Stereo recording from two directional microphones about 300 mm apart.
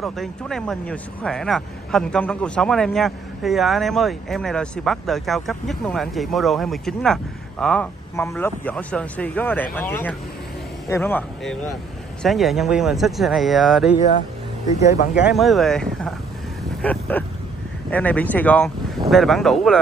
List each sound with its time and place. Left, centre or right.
0.0 s a man's voice: centre
14.9 s speech: left
15.2 s speech: centre
16.8 s a sound: centre
17.9 s speech: centre